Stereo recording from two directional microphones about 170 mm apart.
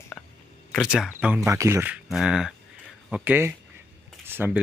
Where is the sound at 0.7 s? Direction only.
5° right (ahead or behind).